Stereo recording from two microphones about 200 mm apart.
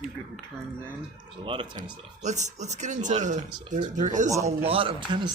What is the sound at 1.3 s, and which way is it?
Speech, 25° right (ahead or behind).